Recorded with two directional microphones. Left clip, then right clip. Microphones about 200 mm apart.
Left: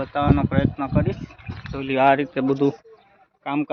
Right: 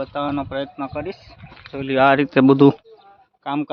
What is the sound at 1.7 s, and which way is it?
Speech, 35° right (ahead or behind).